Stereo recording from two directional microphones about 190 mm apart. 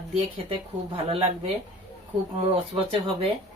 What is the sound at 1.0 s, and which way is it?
Speech, 30° right (ahead or behind).